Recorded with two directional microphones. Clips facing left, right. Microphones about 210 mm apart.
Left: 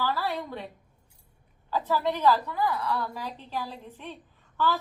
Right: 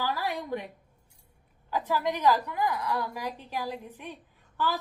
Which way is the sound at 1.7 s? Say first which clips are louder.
Left 2 dB; 15° right (ahead or behind).